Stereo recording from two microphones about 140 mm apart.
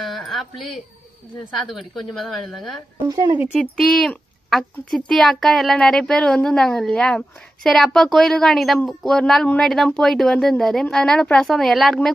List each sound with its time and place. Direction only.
0.0 s a sound: centre (ahead or behind)
1.7 s speech: centre (ahead or behind)
3.1 s speech: 30° right (ahead or behind)
3.5 s speech: 5° left (ahead or behind)